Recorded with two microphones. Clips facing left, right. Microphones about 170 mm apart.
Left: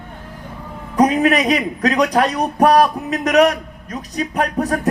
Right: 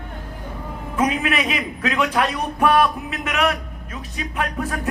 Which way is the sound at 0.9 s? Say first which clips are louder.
Left 7 dB; 40° left (ahead or behind).